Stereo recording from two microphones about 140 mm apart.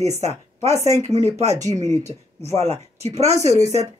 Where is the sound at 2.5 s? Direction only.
50° right (ahead or behind).